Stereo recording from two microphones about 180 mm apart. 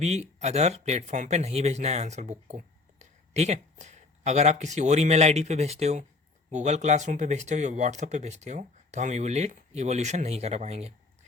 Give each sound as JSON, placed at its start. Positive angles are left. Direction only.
{"t": 0.0, "sound": "speech", "side_deg": -40}